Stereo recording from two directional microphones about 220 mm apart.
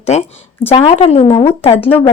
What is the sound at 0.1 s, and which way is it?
A woman's voice, 30° left (ahead or behind).